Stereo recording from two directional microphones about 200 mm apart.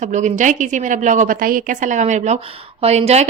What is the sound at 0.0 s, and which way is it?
A woman's voice, 35° right (ahead or behind).